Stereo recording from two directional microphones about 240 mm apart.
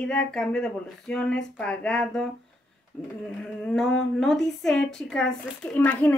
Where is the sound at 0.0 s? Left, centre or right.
Centre.